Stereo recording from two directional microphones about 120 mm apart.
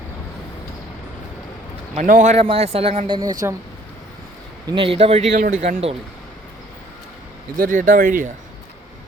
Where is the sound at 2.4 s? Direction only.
55° right (ahead or behind).